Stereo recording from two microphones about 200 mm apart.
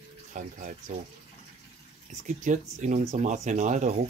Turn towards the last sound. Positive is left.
turn(degrees=-35)  # may be behind; listen again after turning